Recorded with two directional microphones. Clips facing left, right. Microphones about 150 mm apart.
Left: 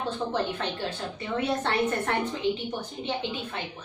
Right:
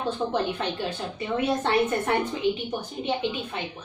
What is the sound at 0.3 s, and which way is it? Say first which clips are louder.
A woman's voice: right 2 dB; 15° right (ahead or behind).